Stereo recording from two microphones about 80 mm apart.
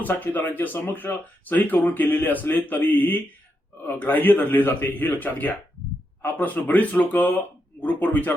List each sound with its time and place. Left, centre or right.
0.0 s speech: left